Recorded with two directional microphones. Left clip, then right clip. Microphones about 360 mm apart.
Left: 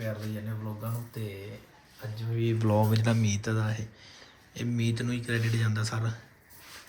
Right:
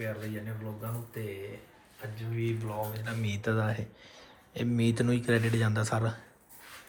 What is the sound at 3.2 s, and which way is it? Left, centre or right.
Speech, centre.